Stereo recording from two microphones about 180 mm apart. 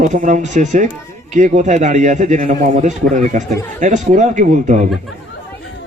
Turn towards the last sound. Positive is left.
turn(degrees=-45)  # may be behind; listen again after turning